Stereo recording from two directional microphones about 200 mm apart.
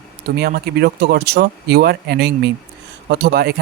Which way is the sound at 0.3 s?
50° right (ahead or behind).